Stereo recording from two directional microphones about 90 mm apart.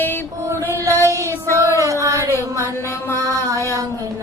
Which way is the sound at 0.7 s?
35° right (ahead or behind).